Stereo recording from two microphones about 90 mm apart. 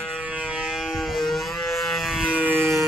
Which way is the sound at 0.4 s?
10° right (ahead or behind).